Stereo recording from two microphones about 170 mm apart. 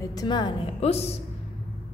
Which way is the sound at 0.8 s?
35° left (ahead or behind).